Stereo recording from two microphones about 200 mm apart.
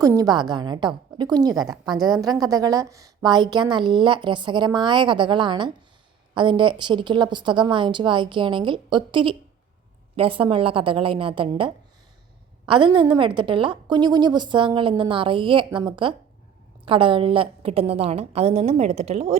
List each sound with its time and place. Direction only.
0.0 s a woman's voice: 15° right (ahead or behind)